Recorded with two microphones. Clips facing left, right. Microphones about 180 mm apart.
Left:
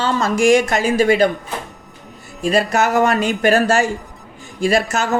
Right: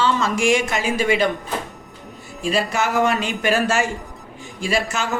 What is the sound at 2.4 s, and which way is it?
Speech, 45° left (ahead or behind).